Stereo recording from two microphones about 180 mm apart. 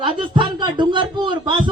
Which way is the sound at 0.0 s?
25° right (ahead or behind).